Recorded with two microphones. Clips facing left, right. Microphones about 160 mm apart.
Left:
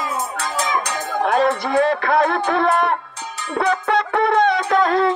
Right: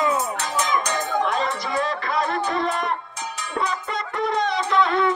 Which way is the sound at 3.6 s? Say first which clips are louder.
Left 9 dB; 65° left (ahead or behind).